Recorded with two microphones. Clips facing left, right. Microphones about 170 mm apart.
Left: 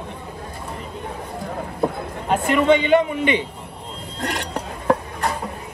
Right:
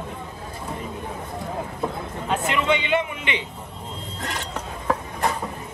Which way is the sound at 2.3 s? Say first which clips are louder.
Left 6 dB; 50° left (ahead or behind).